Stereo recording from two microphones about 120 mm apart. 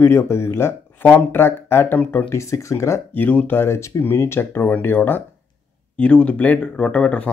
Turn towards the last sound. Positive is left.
turn(degrees=10)  # may be behind; listen again after turning